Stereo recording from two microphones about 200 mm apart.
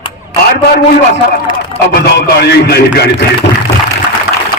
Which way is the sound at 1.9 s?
50° left (ahead or behind).